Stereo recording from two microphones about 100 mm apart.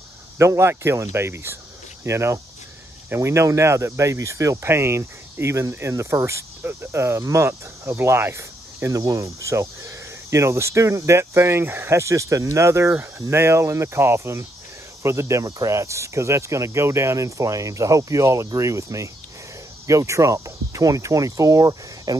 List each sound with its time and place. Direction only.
0.4 s speech: 25° right (ahead or behind)